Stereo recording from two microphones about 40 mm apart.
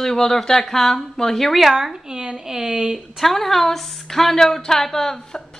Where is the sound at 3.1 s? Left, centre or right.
Centre.